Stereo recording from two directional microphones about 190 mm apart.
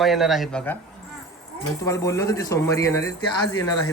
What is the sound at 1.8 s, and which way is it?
Speech, 15° left (ahead or behind).